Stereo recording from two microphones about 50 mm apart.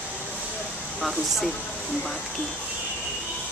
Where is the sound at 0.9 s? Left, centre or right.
Centre.